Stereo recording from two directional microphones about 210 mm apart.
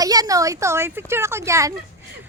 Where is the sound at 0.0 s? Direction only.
15° right (ahead or behind).